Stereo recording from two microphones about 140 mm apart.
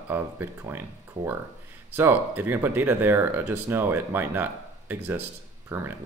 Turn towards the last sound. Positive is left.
turn(degrees=-15)  # may be behind; listen again after turning